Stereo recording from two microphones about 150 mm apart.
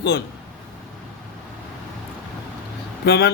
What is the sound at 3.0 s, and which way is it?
Speech, 90° left.